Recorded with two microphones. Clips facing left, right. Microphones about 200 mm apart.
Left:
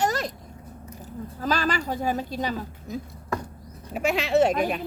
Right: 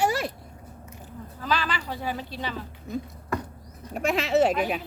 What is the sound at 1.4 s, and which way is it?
A woman's voice, 45° left (ahead or behind).